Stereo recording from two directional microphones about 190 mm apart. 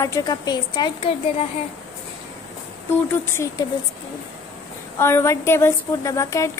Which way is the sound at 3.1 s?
15° left (ahead or behind).